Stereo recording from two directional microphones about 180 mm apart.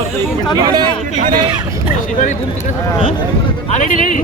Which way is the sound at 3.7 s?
45° left (ahead or behind).